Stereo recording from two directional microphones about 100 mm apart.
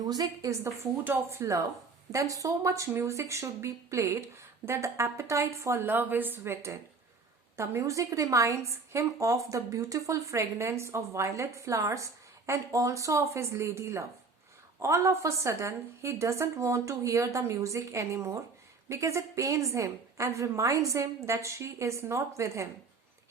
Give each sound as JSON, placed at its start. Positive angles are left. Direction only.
{"t": 0.0, "sound": "a woman's voice", "side_deg": -40}
{"t": 1.0, "sound": "a woman's voice", "side_deg": -25}